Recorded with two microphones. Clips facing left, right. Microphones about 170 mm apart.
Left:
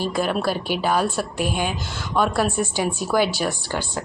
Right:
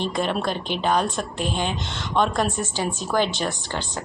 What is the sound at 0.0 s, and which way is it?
A woman's voice, 5° left (ahead or behind).